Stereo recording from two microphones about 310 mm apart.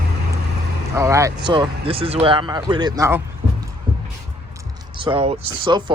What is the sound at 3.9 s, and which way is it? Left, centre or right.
Music, centre.